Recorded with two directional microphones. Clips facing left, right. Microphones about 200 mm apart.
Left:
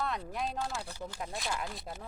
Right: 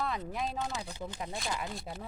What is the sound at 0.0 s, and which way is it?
Speech, centre (ahead or behind).